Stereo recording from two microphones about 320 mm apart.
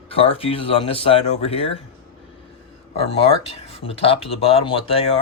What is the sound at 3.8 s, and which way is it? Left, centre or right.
Speech, centre.